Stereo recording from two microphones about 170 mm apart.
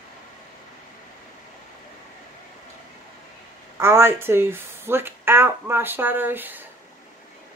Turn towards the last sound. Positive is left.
turn(degrees=-10)  # may be behind; listen again after turning